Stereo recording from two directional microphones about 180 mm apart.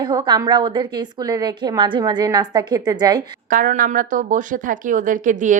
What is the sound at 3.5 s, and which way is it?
Speech, 50° right (ahead or behind).